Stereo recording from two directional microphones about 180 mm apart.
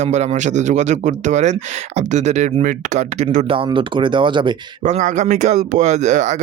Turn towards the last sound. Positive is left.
turn(degrees=-40)  # may be behind; listen again after turning